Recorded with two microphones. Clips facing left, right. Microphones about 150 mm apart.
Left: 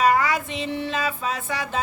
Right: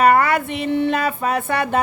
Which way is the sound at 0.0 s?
60° right (ahead or behind).